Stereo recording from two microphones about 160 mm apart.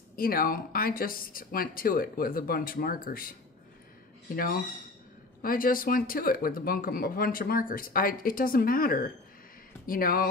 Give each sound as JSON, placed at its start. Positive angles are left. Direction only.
{"t": 0.1, "sound": "speech", "side_deg": 65}
{"t": 5.4, "sound": "speech", "side_deg": 60}